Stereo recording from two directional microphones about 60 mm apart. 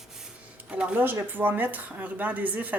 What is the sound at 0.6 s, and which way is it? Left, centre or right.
Speech, centre.